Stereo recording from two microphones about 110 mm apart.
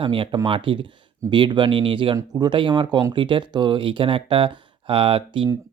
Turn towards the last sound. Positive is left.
turn(degrees=-55)  # may be behind; listen again after turning